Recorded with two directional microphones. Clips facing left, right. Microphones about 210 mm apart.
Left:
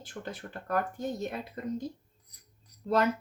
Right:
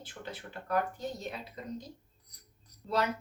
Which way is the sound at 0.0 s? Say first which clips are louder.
Left 4 dB; 45° left (ahead or behind).